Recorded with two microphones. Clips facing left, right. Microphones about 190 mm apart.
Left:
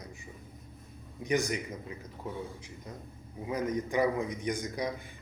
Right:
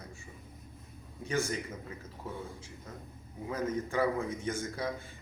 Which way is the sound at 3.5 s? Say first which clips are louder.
Left 2 dB; 15° left (ahead or behind).